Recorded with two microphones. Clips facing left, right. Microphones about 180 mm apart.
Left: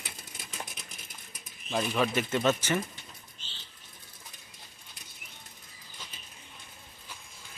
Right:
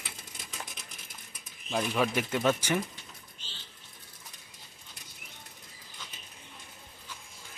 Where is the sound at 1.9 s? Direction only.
10° right (ahead or behind).